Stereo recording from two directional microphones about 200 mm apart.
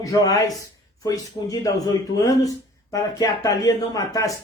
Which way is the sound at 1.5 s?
20° left (ahead or behind).